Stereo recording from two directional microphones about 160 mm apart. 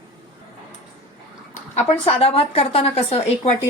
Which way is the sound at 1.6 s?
45° left (ahead or behind).